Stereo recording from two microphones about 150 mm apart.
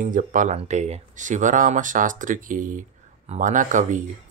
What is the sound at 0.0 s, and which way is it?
Speech, 60° right (ahead or behind).